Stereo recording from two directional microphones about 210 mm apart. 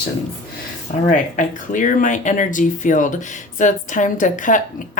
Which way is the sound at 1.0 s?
40° left (ahead or behind).